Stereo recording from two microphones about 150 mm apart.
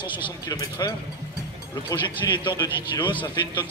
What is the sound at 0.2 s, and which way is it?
Speech, 30° left (ahead or behind).